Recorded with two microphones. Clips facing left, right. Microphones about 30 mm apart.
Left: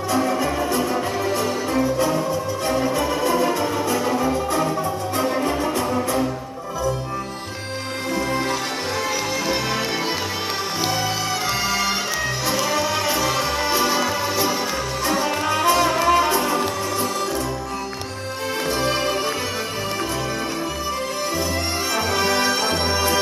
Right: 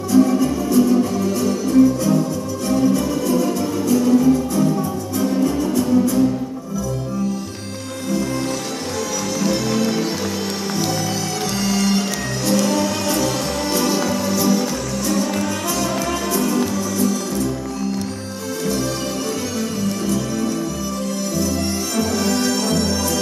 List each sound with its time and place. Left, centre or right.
0.1 s music: left
9.4 s music: left
11.5 s music: centre; by 17.1 s left
21.9 s music: left